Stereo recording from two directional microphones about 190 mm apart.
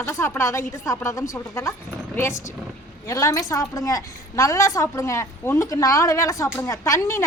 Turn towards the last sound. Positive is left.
turn(degrees=15)  # may be behind; listen again after turning